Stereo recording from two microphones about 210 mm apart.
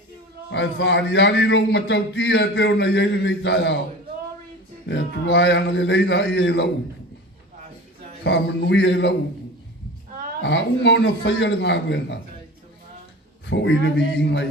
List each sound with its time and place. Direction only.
0.5 s a man's voice: 55° left (ahead or behind)
4.9 s a man's voice: 55° left (ahead or behind)
8.2 s a man's voice: 55° left (ahead or behind)
10.4 s a man's voice: 55° left (ahead or behind)
13.5 s a man's voice: 60° left (ahead or behind)